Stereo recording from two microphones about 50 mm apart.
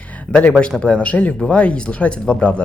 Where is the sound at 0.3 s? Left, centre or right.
Left.